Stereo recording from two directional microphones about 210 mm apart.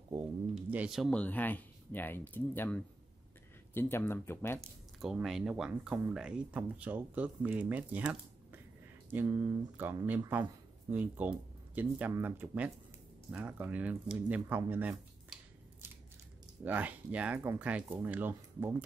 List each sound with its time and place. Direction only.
0.7 s speech: 5° right (ahead or behind); by 4.6 s 10° left (ahead or behind)
5.0 s speech: centre (ahead or behind)
16.6 s speech: 5° right (ahead or behind)